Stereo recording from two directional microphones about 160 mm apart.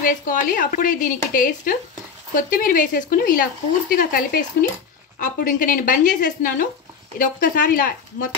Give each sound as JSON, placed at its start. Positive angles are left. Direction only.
{"t": 0.0, "sound": "speech", "side_deg": 55}